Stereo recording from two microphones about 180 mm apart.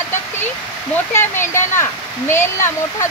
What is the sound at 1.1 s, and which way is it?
Speech, 15° left (ahead or behind).